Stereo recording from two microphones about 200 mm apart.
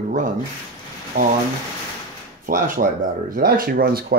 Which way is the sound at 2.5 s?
40° right (ahead or behind).